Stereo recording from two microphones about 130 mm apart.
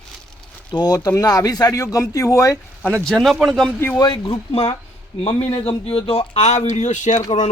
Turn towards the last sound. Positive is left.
turn(degrees=70)  # may be behind; listen again after turning